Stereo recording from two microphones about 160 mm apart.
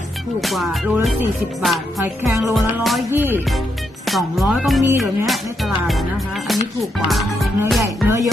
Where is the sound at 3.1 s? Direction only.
10° right (ahead or behind).